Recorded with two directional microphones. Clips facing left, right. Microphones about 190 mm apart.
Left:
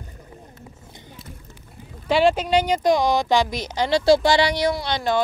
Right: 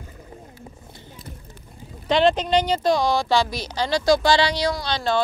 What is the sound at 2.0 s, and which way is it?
Speech, 10° left (ahead or behind).